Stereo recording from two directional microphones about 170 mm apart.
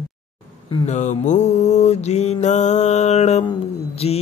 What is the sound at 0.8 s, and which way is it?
Mantra, 45° left (ahead or behind).